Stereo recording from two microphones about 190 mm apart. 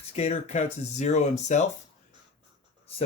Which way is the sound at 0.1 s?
35° left (ahead or behind).